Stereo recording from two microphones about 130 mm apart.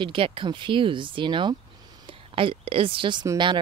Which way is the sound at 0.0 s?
40° right (ahead or behind).